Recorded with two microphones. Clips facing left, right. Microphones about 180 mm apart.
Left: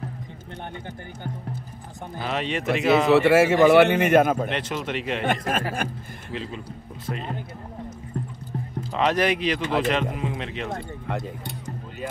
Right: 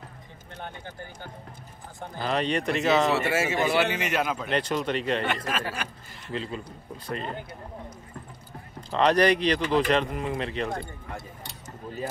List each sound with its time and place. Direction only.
2.1 s speech: centre (ahead or behind)
3.1 s a man's voice: 60° left (ahead or behind)
4.5 s speech: centre (ahead or behind)
5.2 s speech: 50° left (ahead or behind)
6.3 s speech: centre (ahead or behind)
8.9 s speech: 5° left (ahead or behind)
11.1 s speech: 75° left (ahead or behind)